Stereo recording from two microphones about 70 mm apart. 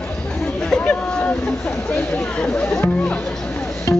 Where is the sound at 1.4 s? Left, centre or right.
Centre.